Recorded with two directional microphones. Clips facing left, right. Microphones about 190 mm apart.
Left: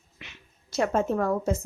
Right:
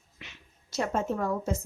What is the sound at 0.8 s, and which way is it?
Speech, 60° left (ahead or behind).